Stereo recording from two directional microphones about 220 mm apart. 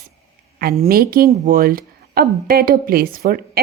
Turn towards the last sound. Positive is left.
turn(degrees=-45)  # may be behind; listen again after turning